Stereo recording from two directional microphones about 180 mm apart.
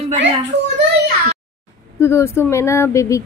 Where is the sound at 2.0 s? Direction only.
15° left (ahead or behind).